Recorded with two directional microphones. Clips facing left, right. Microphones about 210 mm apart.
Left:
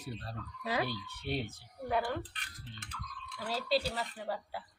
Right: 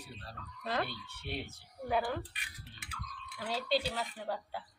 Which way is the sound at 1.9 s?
Centre (ahead or behind).